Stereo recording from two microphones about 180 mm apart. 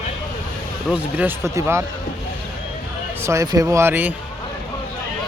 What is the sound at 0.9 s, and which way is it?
Speech, 10° right (ahead or behind).